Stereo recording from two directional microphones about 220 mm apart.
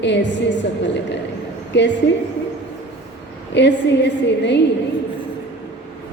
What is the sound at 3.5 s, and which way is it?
A woman's voice, 55° left (ahead or behind).